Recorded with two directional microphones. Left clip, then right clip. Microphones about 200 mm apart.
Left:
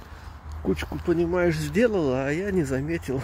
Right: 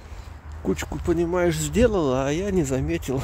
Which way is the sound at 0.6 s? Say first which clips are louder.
Right 1 dB; 10° right (ahead or behind).